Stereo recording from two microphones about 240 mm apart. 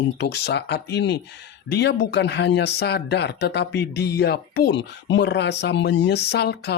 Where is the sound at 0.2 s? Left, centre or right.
Left.